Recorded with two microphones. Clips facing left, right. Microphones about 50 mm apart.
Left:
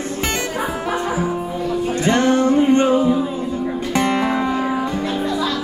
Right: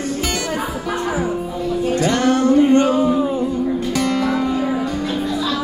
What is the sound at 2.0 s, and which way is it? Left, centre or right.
Music, left.